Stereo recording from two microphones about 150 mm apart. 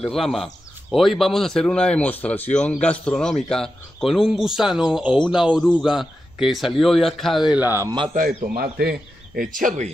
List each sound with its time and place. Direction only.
0.0 s speech: centre (ahead or behind); by 7.9 s 15° right (ahead or behind)
8.1 s speech: 60° right (ahead or behind)